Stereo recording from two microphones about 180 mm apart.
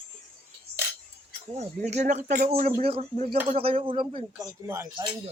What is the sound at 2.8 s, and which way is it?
Speech, 30° right (ahead or behind).